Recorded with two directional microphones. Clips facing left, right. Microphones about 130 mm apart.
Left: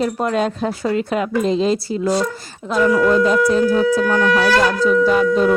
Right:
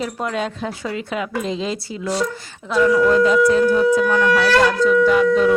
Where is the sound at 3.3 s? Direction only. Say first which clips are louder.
Even; 35° left (ahead or behind).